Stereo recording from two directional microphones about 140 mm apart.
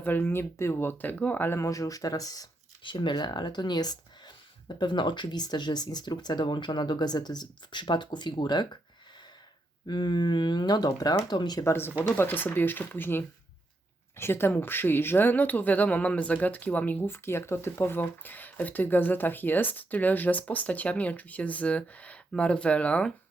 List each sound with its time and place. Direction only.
0.0 s speech: 15° left (ahead or behind); by 8.8 s 30° left (ahead or behind)
9.8 s speech: 30° left (ahead or behind)
11.6 s speech: 15° left (ahead or behind)